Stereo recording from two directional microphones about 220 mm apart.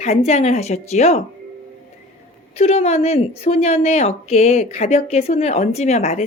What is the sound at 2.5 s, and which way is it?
A woman's voice, 30° left (ahead or behind).